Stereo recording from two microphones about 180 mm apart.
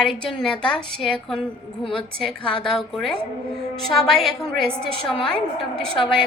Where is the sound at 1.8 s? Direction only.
30° left (ahead or behind).